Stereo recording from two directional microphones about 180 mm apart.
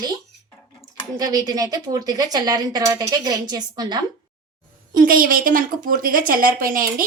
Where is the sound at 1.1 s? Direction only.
20° right (ahead or behind).